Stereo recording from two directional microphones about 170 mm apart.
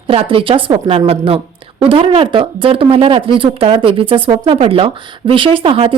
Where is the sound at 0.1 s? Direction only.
35° right (ahead or behind).